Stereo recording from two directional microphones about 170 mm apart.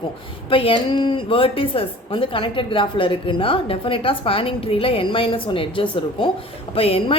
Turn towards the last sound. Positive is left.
turn(degrees=35)  # may be behind; listen again after turning